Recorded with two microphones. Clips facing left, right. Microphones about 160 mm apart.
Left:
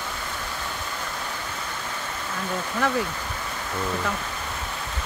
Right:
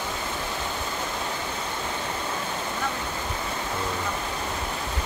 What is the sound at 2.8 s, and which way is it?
Speech, 90° left.